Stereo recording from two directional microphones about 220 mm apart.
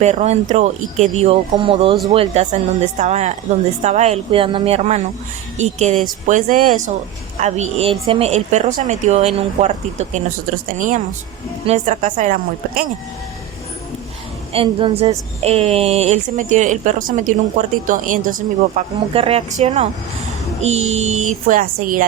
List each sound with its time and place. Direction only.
0.0 s a woman's voice: 30° right (ahead or behind)
14.5 s a woman's voice: 25° right (ahead or behind)
20.6 s music: 30° right (ahead or behind)
20.9 s a woman's voice: 30° right (ahead or behind)